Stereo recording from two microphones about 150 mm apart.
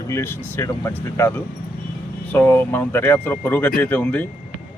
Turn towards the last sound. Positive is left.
turn(degrees=10)  # may be behind; listen again after turning